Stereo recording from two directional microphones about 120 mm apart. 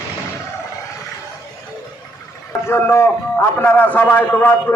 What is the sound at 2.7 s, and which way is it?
A man's voice, 20° left (ahead or behind).